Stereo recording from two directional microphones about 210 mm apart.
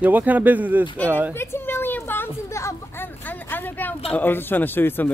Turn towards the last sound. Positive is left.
turn(degrees=10)  # may be behind; listen again after turning